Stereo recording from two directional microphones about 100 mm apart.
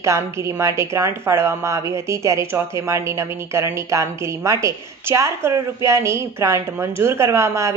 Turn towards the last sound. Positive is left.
turn(degrees=-30)  # may be behind; listen again after turning